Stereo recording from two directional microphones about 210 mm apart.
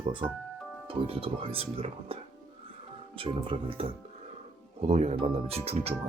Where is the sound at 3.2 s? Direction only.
25° right (ahead or behind).